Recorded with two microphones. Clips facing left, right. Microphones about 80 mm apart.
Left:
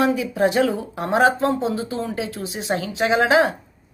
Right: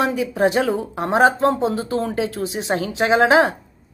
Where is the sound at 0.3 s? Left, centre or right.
Right.